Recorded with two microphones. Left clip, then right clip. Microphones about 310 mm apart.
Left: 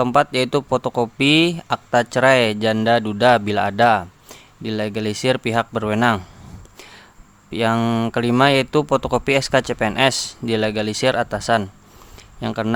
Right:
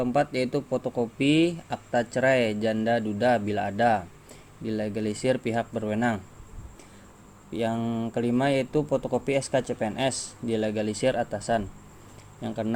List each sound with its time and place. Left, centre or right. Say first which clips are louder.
0.0 s speech: left 8 dB; left
7.5 s speech: left 10 dB; left